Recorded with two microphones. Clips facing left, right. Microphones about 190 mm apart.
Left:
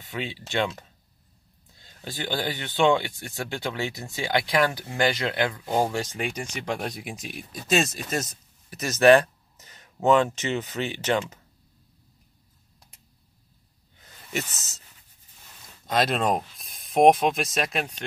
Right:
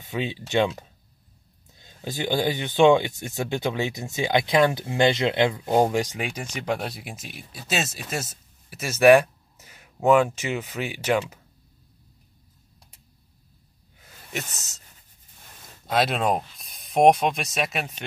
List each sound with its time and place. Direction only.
0.0 s speech: 20° right (ahead or behind)
6.1 s speech: 5° right (ahead or behind)
13.9 s a sound: 5° right (ahead or behind)
15.9 s speech: centre (ahead or behind)